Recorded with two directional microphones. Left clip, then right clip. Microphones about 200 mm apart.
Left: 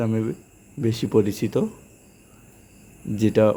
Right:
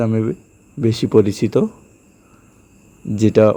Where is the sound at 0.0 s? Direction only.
30° right (ahead or behind).